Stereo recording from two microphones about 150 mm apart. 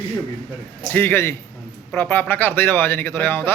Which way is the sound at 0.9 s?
15° left (ahead or behind).